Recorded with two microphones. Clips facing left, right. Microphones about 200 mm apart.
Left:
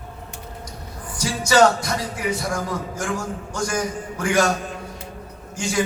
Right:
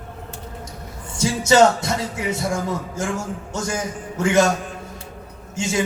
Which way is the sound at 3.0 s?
25° right (ahead or behind).